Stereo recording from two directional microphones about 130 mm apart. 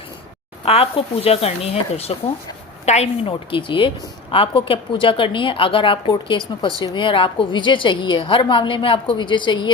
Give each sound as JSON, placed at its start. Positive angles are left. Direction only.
{"t": 0.6, "sound": "a woman's voice", "side_deg": 50}